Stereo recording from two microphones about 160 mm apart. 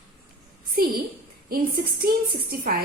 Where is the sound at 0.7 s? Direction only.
65° right (ahead or behind).